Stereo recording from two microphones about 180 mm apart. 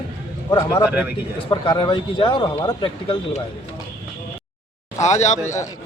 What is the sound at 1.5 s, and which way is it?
A man's voice, 25° left (ahead or behind).